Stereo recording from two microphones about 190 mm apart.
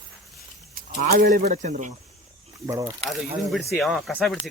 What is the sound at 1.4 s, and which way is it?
Speech, 40° right (ahead or behind).